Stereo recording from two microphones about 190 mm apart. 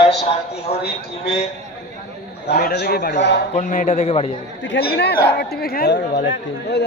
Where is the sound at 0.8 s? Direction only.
60° left (ahead or behind).